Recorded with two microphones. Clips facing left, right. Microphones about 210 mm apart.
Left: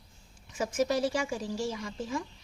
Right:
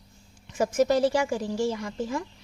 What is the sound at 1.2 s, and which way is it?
A woman's voice, 60° right (ahead or behind).